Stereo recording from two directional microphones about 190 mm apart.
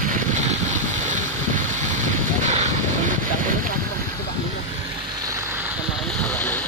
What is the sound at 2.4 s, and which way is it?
Vehicle, 40° right (ahead or behind).